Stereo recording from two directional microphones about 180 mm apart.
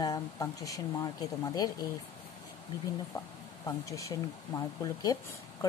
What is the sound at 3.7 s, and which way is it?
Speech, 15° left (ahead or behind).